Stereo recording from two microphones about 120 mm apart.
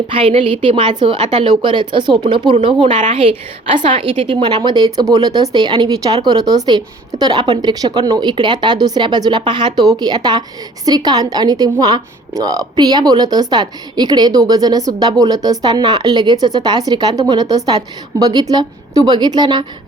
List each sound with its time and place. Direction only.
0.1 s a woman's voice: 50° right (ahead or behind)